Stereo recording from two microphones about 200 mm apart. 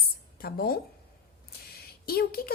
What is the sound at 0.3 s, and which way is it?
A woman's voice, 50° left (ahead or behind).